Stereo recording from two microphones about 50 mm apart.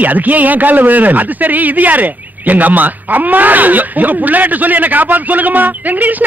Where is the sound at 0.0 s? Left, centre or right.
Right.